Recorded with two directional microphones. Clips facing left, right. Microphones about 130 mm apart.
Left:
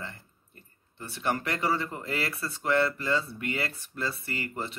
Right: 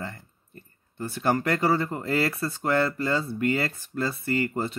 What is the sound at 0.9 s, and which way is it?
Speech, 40° right (ahead or behind).